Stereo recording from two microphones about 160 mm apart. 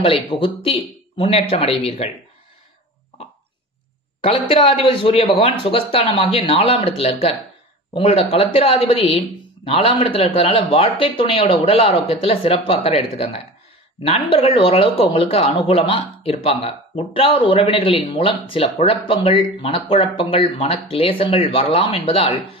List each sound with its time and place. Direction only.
0.0 s speech: 35° left (ahead or behind)
4.2 s speech: 35° left (ahead or behind)